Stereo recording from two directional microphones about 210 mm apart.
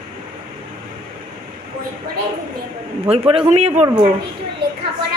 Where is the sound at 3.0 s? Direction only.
30° right (ahead or behind).